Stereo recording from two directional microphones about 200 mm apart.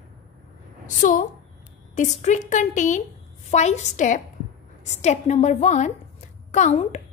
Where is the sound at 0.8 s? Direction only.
40° left (ahead or behind).